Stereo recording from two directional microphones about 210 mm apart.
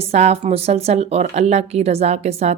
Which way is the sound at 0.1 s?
30° right (ahead or behind).